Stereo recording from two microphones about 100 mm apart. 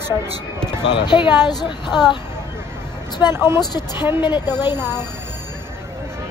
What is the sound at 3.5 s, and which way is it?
A woman's voice, 45° left (ahead or behind).